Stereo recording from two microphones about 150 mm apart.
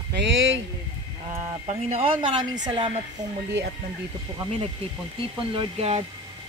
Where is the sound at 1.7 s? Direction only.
40° right (ahead or behind).